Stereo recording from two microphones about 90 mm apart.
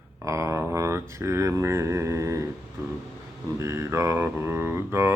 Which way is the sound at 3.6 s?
30° right (ahead or behind).